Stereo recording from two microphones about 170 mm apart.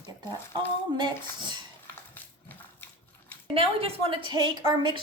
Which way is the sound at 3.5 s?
35° right (ahead or behind).